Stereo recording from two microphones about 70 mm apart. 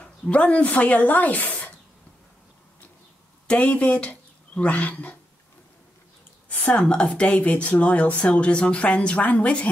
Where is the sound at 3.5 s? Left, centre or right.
Left.